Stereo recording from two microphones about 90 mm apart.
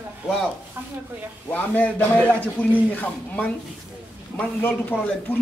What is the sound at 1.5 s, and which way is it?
Speech, 15° left (ahead or behind).